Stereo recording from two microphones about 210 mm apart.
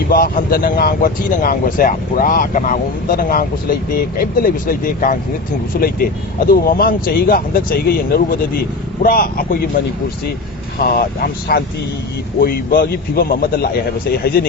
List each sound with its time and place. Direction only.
0.1 s a man's voice: 40° left (ahead or behind)
10.8 s speech: 45° left (ahead or behind)